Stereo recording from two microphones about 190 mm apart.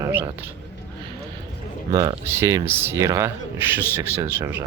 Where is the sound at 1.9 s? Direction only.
25° right (ahead or behind).